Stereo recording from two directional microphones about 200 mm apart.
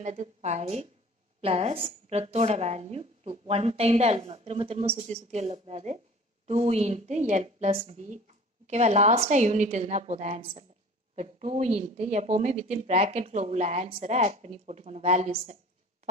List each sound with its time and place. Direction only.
0.0 s a woman's voice: 35° right (ahead or behind)